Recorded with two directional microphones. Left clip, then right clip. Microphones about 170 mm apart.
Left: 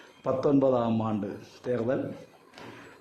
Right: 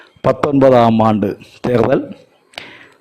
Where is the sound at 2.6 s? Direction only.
60° right (ahead or behind).